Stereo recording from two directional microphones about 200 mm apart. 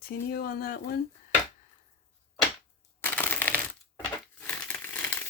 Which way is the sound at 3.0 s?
10° left (ahead or behind).